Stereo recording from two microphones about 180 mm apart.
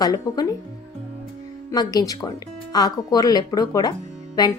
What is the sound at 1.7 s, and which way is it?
Speech, 20° left (ahead or behind).